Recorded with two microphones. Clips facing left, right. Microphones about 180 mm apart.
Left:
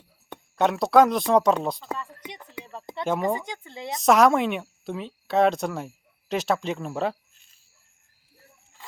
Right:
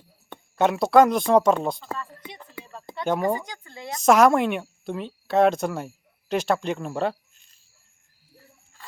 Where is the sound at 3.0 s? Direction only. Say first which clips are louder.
Right 1 dB; centre (ahead or behind).